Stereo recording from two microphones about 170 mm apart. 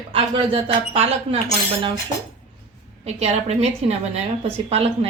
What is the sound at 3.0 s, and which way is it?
A woman's voice, 40° right (ahead or behind).